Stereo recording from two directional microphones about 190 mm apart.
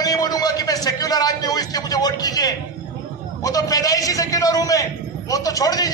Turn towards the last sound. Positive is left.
turn(degrees=20)  # may be behind; listen again after turning